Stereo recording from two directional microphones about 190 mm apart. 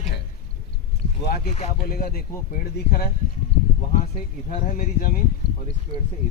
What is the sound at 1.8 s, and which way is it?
Speech, 50° left (ahead or behind).